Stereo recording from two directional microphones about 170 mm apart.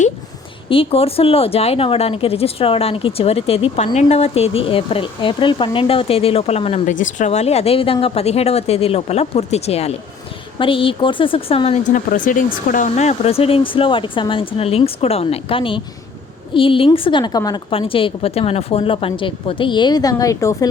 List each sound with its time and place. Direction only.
0.7 s speech: 35° left (ahead or behind)
11.9 s speech: 50° left (ahead or behind); by 20.7 s 20° left (ahead or behind)